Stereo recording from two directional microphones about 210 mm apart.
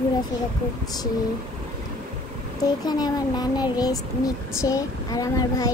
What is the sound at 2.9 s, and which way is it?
Speech, 20° left (ahead or behind).